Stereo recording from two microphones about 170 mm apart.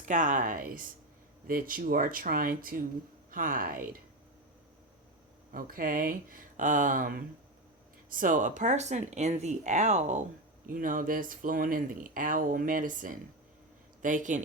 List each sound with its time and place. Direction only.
0.0 s speech: 50° right (ahead or behind)
5.5 s speech: 60° right (ahead or behind)
10.7 s speech: 55° right (ahead or behind)